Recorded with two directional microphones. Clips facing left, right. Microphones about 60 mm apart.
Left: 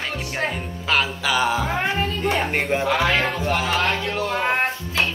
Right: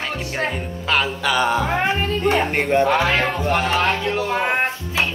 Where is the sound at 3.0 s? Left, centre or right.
Right.